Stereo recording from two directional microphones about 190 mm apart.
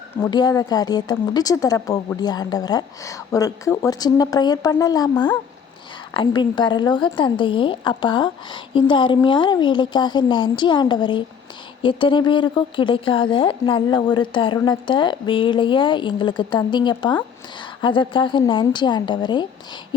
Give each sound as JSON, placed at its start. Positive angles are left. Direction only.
{"t": 0.2, "sound": "speech", "side_deg": 20}
{"t": 6.1, "sound": "speech", "side_deg": 25}